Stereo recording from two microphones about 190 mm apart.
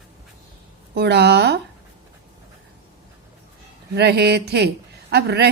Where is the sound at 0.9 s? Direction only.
60° right (ahead or behind).